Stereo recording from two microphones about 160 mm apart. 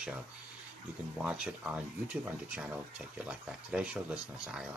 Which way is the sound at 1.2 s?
5° right (ahead or behind).